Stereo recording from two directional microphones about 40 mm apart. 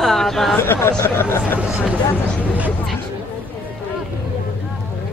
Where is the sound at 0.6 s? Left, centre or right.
Left.